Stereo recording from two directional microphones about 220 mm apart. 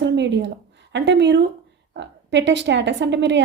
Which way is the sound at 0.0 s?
50° right (ahead or behind).